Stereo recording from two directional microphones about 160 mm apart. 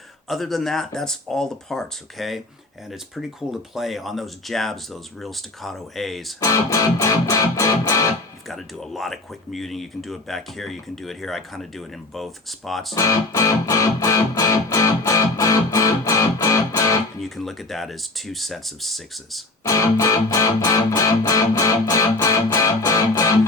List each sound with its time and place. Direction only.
0.3 s speech: centre (ahead or behind)
6.4 s music: 20° left (ahead or behind)
8.4 s speech: centre (ahead or behind)
12.9 s music: 20° left (ahead or behind)
17.2 s speech: centre (ahead or behind)
19.6 s music: 20° left (ahead or behind)